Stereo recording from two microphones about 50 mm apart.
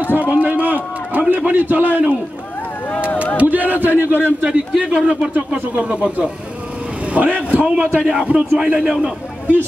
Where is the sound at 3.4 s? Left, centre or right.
Right.